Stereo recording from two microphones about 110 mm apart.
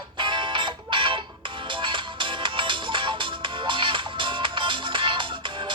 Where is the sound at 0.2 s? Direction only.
50° right (ahead or behind).